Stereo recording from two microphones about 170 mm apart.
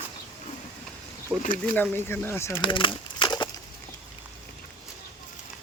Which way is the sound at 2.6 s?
30° left (ahead or behind).